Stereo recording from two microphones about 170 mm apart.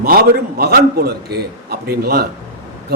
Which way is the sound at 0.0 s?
60° right (ahead or behind).